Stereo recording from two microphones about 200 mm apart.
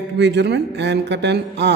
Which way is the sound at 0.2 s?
60° right (ahead or behind).